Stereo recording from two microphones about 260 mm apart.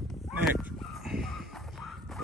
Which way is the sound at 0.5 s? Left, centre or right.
Centre.